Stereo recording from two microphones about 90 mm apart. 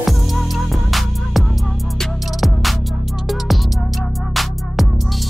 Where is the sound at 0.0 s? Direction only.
Centre (ahead or behind).